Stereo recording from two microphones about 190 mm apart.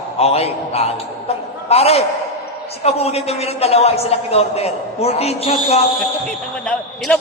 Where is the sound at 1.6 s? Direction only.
30° left (ahead or behind).